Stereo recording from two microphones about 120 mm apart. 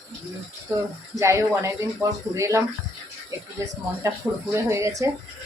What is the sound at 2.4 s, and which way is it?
Speech, 25° right (ahead or behind).